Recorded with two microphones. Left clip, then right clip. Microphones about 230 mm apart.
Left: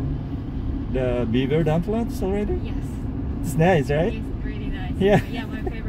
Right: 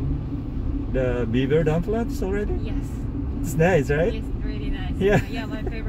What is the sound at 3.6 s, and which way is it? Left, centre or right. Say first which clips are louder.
Speech: even; centre.